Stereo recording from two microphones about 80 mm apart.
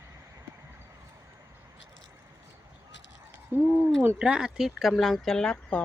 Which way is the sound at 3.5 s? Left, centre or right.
Right.